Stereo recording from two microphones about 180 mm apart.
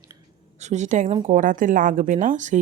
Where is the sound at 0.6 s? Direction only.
40° right (ahead or behind).